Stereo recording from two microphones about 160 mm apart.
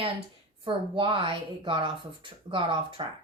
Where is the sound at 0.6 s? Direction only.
30° right (ahead or behind).